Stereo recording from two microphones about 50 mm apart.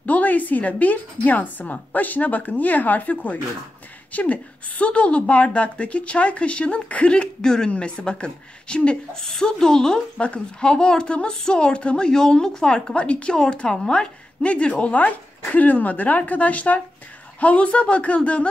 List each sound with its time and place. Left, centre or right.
0.0 s a woman's voice: left
9.2 s a woman's voice: centre; by 18.5 s left